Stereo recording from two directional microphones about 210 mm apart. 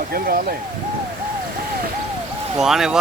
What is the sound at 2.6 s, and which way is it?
Speech, centre (ahead or behind).